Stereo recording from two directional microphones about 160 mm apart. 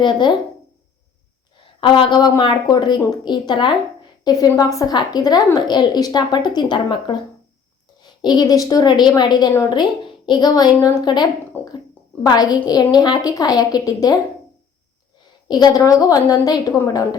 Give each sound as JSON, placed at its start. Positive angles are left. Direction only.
{"t": 0.0, "sound": "a woman's voice", "side_deg": 30}
{"t": 1.8, "sound": "a woman's voice", "side_deg": 30}
{"t": 11.6, "sound": "a sound", "side_deg": 15}
{"t": 12.2, "sound": "a woman's voice", "side_deg": 25}
{"t": 15.4, "sound": "a woman's voice", "side_deg": 25}